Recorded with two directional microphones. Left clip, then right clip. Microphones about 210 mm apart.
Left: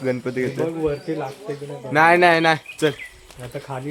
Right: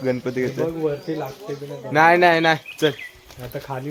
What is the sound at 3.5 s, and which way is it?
Speech, 30° right (ahead or behind).